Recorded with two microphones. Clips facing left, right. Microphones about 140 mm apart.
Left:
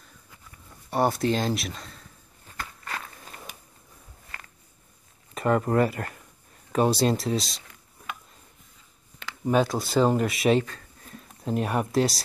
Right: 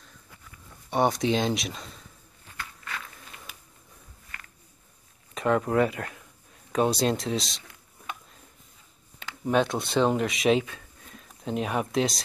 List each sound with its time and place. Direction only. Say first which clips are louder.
0.8 s speech: even; 5° left (ahead or behind)
2.5 s walk: left 3 dB; 40° left (ahead or behind)
4.3 s a sound: left 2 dB; 35° left (ahead or behind)
5.3 s speech: left 1 dB; centre (ahead or behind)
9.4 s speech: left 1 dB; centre (ahead or behind)